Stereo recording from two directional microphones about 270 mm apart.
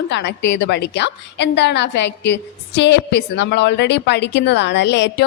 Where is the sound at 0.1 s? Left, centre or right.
Left.